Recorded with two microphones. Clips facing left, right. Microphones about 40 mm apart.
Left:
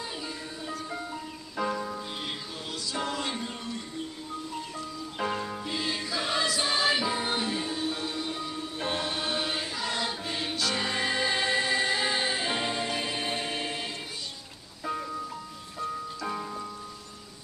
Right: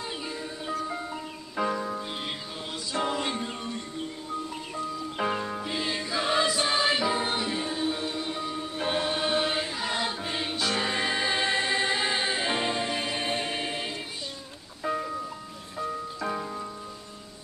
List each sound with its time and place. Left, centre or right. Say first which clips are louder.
0.8 s music: right 2 dB; centre
5.2 s music: right 2 dB; centre
14.9 s music: right 3 dB; right
16.3 s music: right 2 dB; centre